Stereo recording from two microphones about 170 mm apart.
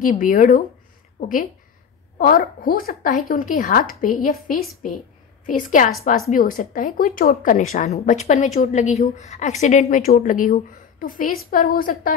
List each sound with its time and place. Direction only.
0.0 s a woman's voice: 50° left (ahead or behind)